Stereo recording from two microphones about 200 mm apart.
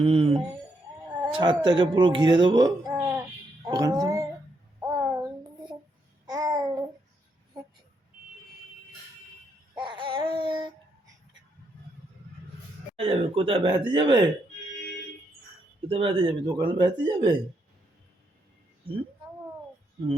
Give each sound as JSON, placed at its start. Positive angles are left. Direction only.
{"t": 0.0, "sound": "a sound", "side_deg": -30}
{"t": 1.2, "sound": "speech", "side_deg": -25}
{"t": 3.7, "sound": "a sound", "side_deg": -20}
{"t": 6.2, "sound": "babbling", "side_deg": -20}
{"t": 9.7, "sound": "babbling", "side_deg": -25}
{"t": 13.0, "sound": "speech", "side_deg": -25}
{"t": 15.9, "sound": "speech", "side_deg": -25}